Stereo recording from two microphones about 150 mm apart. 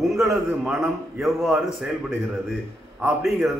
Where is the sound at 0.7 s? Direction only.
5° right (ahead or behind).